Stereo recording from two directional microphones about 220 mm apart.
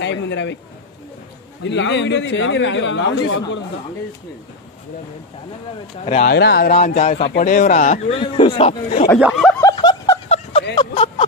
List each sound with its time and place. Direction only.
0.0 s a man's voice: 55° left (ahead or behind)
1.6 s speech: 55° left (ahead or behind)
6.2 s speech: 50° left (ahead or behind)
9.2 s speech: centre (ahead or behind)
9.6 s snicker: 15° left (ahead or behind)
10.2 s a sound: 30° left (ahead or behind)